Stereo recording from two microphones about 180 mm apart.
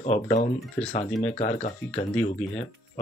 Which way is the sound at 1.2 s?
40° left (ahead or behind).